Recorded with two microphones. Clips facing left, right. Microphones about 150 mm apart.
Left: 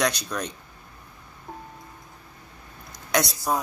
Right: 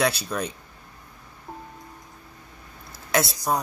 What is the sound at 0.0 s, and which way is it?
Speech, 5° right (ahead or behind).